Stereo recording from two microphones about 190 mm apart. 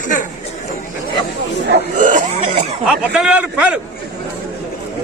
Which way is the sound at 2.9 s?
5° right (ahead or behind).